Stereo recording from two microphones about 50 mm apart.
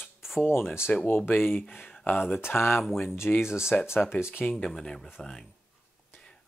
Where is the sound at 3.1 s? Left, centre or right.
Left.